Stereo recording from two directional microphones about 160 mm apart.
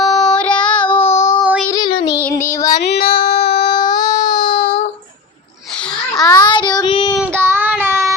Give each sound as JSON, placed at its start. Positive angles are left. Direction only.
{"t": 0.0, "sound": "child singing", "side_deg": 0}
{"t": 1.0, "sound": "child singing", "side_deg": 45}
{"t": 1.7, "sound": "child singing", "side_deg": 30}
{"t": 2.1, "sound": "child singing", "side_deg": 15}
{"t": 2.8, "sound": "female singing", "side_deg": 80}
{"t": 3.8, "sound": "a sound", "side_deg": 25}
{"t": 6.2, "sound": "child singing", "side_deg": 25}
{"t": 7.2, "sound": "child singing", "side_deg": -15}